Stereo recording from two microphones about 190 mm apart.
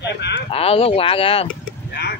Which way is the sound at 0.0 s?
65° left (ahead or behind).